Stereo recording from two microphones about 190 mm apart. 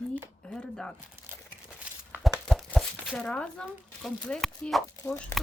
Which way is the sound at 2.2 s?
Centre (ahead or behind).